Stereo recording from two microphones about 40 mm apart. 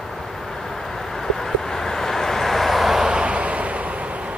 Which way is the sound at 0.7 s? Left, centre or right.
Centre.